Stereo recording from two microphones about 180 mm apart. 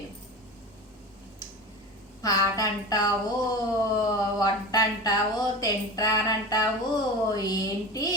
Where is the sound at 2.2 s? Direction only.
20° left (ahead or behind).